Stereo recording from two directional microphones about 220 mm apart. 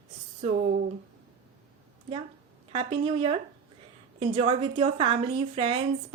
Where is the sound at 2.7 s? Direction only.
25° right (ahead or behind).